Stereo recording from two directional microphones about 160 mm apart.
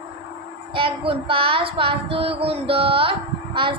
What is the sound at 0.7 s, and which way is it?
Child singing, 35° right (ahead or behind).